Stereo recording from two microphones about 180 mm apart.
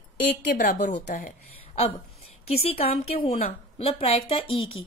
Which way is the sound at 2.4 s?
35° left (ahead or behind).